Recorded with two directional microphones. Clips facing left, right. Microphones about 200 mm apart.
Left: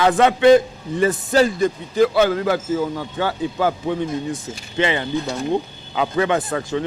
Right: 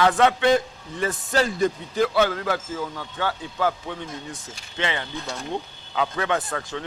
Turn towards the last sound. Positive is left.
turn(degrees=10)  # may be behind; listen again after turning